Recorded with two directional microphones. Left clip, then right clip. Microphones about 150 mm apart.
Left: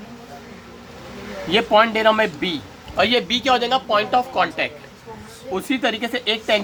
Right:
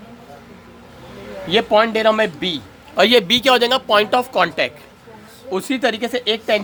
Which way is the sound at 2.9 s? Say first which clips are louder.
Right 5 dB; 60° right (ahead or behind).